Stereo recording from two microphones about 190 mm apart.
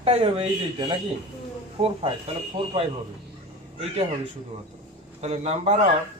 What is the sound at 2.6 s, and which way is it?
Speech, 25° right (ahead or behind).